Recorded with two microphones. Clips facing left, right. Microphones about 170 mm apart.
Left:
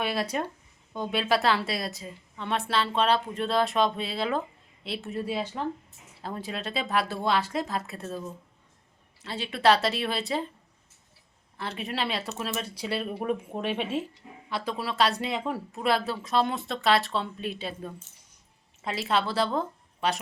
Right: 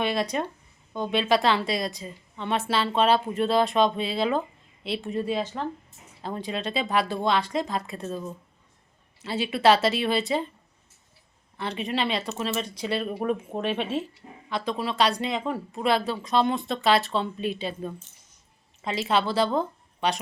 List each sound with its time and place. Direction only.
0.0 s a woman's voice: 5° left (ahead or behind)
9.2 s a woman's voice: 5° right (ahead or behind)
11.5 s a woman's voice: centre (ahead or behind)